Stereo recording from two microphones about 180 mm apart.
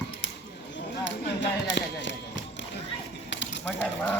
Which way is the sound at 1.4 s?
90° left.